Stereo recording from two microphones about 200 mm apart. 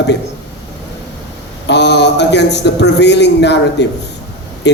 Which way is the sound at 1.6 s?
60° left (ahead or behind).